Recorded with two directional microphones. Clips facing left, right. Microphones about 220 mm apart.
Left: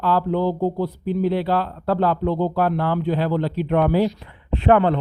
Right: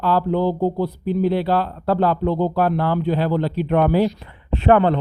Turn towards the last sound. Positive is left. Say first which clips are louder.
# right 1 dB
turn(degrees=-30)  # may be behind; listen again after turning